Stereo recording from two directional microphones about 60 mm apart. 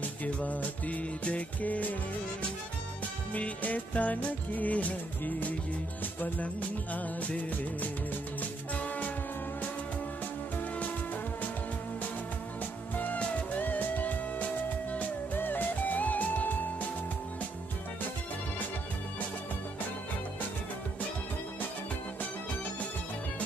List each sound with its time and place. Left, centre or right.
0.2 s music: left
3.3 s music: left
12.9 s music: left